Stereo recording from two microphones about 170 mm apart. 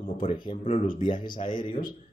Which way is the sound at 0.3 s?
30° left (ahead or behind).